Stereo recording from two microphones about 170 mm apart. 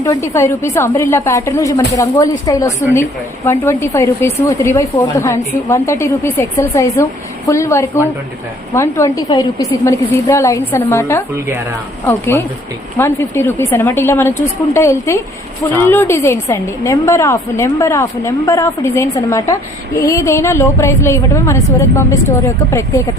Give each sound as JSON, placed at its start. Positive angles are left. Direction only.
{"t": 0.0, "sound": "a woman's voice", "side_deg": 20}